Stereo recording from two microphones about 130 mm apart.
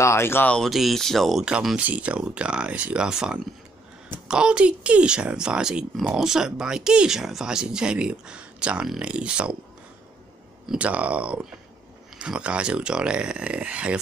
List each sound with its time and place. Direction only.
0.0 s speech: 20° left (ahead or behind)
0.6 s speech: centre (ahead or behind)
10.7 s speech: 10° right (ahead or behind)